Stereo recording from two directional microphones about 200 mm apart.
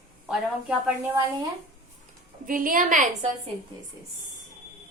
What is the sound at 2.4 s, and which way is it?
Speech, 45° right (ahead or behind).